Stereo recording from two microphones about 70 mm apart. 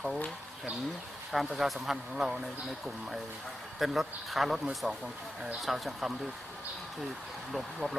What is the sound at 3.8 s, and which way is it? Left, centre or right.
Speech, centre.